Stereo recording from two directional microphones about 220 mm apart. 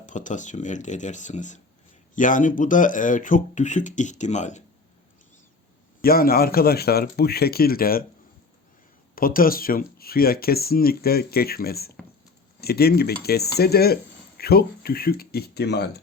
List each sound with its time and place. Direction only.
0.0 s speech: 35° left (ahead or behind)
6.0 s speech: 45° left (ahead or behind)
9.1 s speech: 40° left (ahead or behind)